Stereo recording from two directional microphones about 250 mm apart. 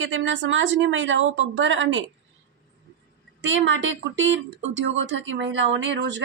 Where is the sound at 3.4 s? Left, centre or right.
Right.